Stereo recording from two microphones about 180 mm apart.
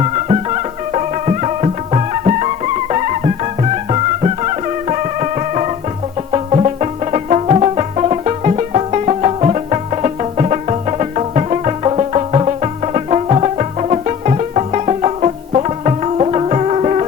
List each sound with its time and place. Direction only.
0.0 s music: 35° right (ahead or behind)